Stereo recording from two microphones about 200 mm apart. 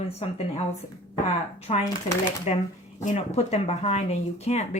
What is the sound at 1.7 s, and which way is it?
Speech, 30° left (ahead or behind).